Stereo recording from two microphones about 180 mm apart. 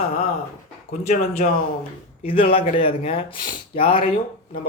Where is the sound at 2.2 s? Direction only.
30° left (ahead or behind).